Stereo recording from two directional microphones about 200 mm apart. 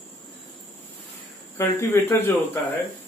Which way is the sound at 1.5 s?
10° left (ahead or behind).